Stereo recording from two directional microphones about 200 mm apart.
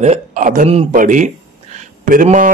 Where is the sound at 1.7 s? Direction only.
40° right (ahead or behind).